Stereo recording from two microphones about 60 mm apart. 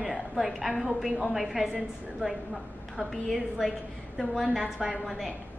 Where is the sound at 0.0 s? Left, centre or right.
Centre.